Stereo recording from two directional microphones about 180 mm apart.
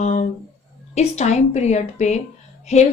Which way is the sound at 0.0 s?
40° left (ahead or behind).